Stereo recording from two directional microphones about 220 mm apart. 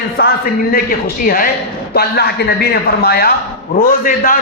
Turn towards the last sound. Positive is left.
turn(degrees=40)  # may be behind; listen again after turning